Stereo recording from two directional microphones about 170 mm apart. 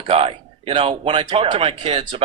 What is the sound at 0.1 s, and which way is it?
A man's voice, 35° right (ahead or behind).